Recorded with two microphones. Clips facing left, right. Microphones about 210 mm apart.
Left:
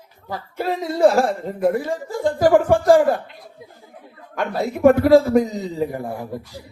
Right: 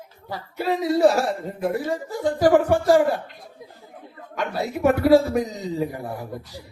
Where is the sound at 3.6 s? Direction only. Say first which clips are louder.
Right 1 dB; 5° left (ahead or behind).